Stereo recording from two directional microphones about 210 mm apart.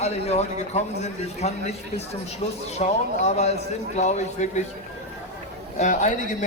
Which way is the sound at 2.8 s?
30° left (ahead or behind).